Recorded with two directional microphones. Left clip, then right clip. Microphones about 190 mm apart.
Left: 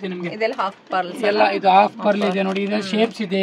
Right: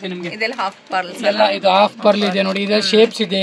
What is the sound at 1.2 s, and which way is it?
A man's voice, 60° right (ahead or behind).